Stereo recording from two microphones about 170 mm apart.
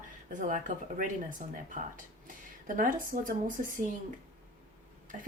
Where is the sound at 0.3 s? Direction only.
50° right (ahead or behind).